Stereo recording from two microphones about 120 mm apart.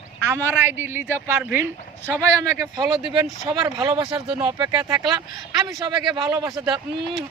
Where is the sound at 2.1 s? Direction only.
30° right (ahead or behind).